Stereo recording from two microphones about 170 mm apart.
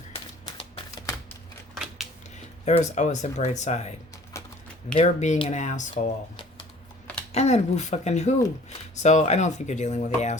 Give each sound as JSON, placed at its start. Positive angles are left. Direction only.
{"t": 0.4, "sound": "a sound", "side_deg": 20}
{"t": 1.7, "sound": "scissors", "side_deg": 0}
{"t": 2.6, "sound": "speech", "side_deg": 45}
{"t": 4.9, "sound": "speech", "side_deg": 40}
{"t": 5.9, "sound": "speech", "side_deg": 30}
{"t": 7.3, "sound": "speech", "side_deg": 40}